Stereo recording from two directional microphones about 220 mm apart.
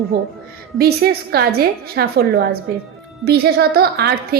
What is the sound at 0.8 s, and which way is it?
A woman's voice, 45° right (ahead or behind).